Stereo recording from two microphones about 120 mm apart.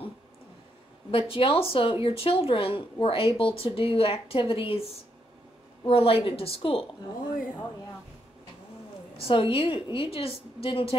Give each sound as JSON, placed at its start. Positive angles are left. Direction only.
{"t": 1.1, "sound": "a woman's voice", "side_deg": 50}
{"t": 5.9, "sound": "a woman's voice", "side_deg": 55}
{"t": 9.3, "sound": "a woman's voice", "side_deg": 50}